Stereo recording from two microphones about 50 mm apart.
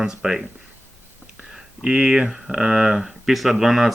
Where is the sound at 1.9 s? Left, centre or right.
Right.